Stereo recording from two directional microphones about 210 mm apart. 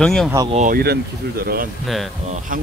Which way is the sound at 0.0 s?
Centre (ahead or behind).